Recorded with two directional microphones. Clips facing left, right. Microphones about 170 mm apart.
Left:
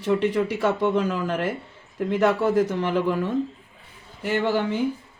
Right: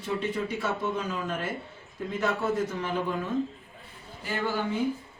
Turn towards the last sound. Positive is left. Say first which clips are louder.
# left 6 dB
turn(degrees=80)